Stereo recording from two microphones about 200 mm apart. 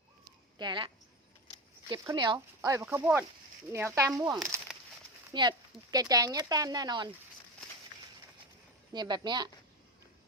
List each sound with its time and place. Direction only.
0.6 s speech: 25° right (ahead or behind)
1.9 s speech: 25° right (ahead or behind); by 4.8 s 5° right (ahead or behind)
5.3 s speech: 20° right (ahead or behind)
8.9 s speech: 20° right (ahead or behind)